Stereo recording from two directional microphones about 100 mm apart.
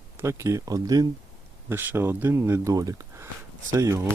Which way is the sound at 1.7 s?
20° right (ahead or behind).